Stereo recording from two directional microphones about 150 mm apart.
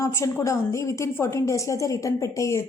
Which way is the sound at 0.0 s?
20° left (ahead or behind).